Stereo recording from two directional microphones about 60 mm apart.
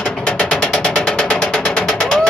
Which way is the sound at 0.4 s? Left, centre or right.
Centre.